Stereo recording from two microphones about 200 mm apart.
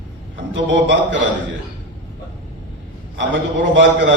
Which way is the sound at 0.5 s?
65° right (ahead or behind).